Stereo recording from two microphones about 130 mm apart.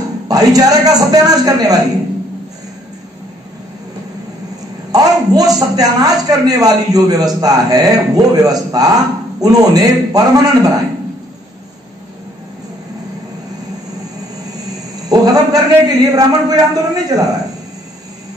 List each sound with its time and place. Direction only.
0.3 s a man's voice: 30° right (ahead or behind)
4.9 s a man's voice: 30° right (ahead or behind)
15.0 s a man's voice: 30° right (ahead or behind)